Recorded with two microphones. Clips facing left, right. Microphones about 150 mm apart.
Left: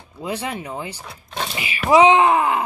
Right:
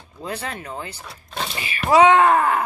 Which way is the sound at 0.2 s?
15° left (ahead or behind).